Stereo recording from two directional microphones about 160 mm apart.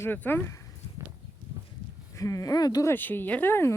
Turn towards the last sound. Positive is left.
turn(degrees=15)  # may be behind; listen again after turning